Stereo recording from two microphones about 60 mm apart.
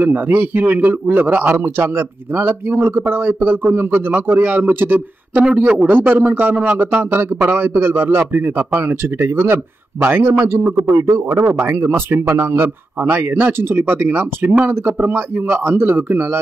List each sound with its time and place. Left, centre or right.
0.0 s a man's voice: right
10.9 s a man's voice: right
11.1 s a man's voice: right